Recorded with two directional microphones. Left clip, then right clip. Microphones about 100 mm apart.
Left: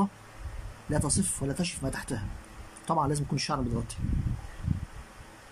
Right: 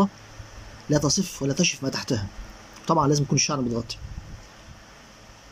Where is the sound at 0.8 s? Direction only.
10° right (ahead or behind).